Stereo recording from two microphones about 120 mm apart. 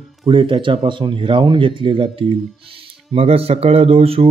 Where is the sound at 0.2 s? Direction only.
45° right (ahead or behind).